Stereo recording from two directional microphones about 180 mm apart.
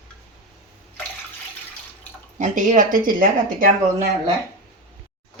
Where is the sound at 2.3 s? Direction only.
45° right (ahead or behind).